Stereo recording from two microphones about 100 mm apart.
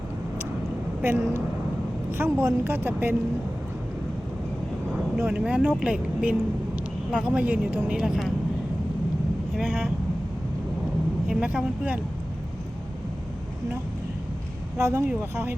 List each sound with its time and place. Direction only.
1.0 s speech: 25° right (ahead or behind)
5.2 s speech: 10° right (ahead or behind)
11.3 s speech: 10° right (ahead or behind)
14.8 s speech: 30° right (ahead or behind)